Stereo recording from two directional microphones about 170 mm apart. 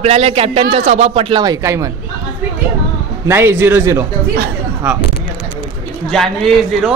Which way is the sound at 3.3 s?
15° right (ahead or behind).